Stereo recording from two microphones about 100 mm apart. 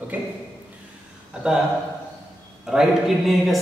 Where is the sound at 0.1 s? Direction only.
15° right (ahead or behind).